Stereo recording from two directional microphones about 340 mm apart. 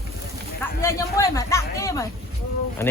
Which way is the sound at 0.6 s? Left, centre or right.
Centre.